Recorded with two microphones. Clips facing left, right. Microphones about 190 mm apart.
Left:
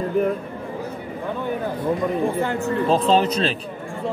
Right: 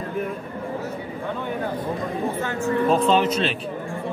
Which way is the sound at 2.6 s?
35° left (ahead or behind).